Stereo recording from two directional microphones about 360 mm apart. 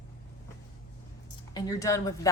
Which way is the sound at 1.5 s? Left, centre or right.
Centre.